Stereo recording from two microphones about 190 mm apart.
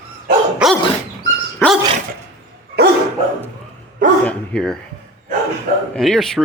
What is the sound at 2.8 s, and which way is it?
Dog, 55° right (ahead or behind).